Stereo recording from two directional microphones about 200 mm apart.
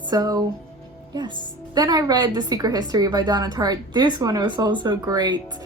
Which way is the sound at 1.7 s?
20° right (ahead or behind).